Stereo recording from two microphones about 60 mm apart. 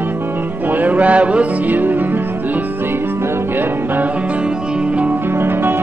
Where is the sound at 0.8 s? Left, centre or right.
Right.